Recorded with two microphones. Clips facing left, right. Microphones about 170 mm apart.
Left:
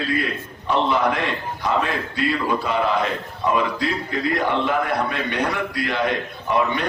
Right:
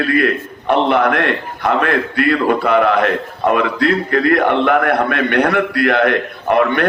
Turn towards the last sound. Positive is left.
turn(degrees=-65)  # may be behind; listen again after turning